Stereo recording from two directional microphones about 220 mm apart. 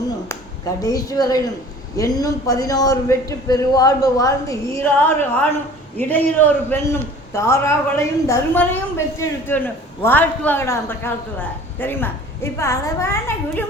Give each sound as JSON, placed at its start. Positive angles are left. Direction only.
{"t": 0.8, "sound": "a man's voice", "side_deg": 15}